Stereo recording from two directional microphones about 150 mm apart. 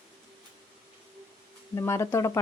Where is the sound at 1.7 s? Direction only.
20° left (ahead or behind).